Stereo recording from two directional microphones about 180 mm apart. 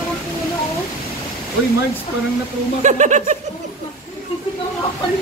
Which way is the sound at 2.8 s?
40° right (ahead or behind).